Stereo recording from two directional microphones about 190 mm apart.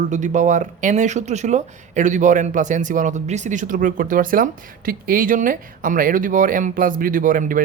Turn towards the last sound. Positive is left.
turn(degrees=-45)  # may be behind; listen again after turning